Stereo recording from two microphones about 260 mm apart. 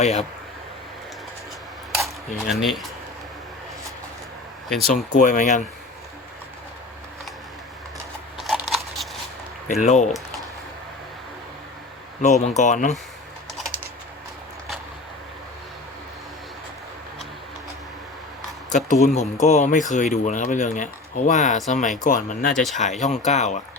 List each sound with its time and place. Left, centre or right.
0.0 s speech: left
2.0 s speech: centre
4.7 s speech: centre
5.1 s speech: left
8.4 s a sound: centre
9.8 s speech: left
12.2 s speech: left
18.9 s speech: left
22.5 s speech: centre
22.8 s speech: left